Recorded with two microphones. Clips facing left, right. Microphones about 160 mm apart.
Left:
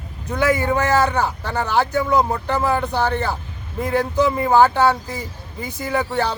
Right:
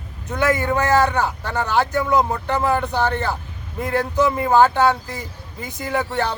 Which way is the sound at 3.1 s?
15° left (ahead or behind).